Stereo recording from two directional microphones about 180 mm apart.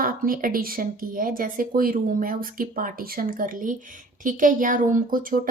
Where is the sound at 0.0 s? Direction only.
50° right (ahead or behind).